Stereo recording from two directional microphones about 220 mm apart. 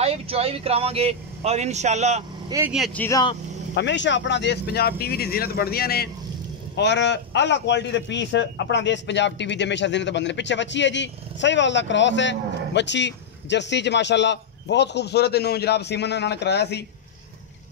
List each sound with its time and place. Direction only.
0.0 s speech: 25° right (ahead or behind)
2.5 s speech: 5° right (ahead or behind); by 3.3 s 15° left (ahead or behind)
3.7 s a man's voice: 55° left (ahead or behind)